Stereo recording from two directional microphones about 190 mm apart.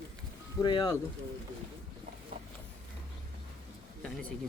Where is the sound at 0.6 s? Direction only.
20° left (ahead or behind).